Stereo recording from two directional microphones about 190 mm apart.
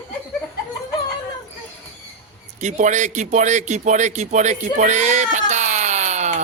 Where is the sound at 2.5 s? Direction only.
40° right (ahead or behind).